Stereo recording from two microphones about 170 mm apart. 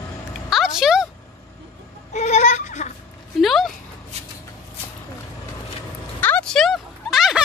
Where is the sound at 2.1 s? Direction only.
45° left (ahead or behind).